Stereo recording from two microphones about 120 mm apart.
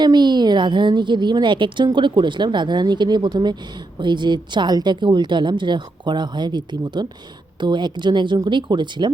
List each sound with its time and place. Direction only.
0.0 s a woman's voice: 35° right (ahead or behind)